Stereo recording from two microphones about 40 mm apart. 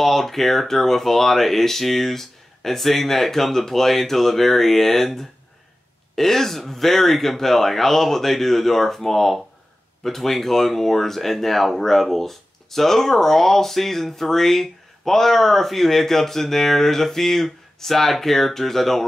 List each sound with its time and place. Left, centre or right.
0.0 s speech: centre